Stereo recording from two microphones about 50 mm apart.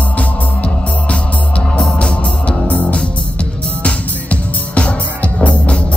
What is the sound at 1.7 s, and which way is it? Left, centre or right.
Music, centre.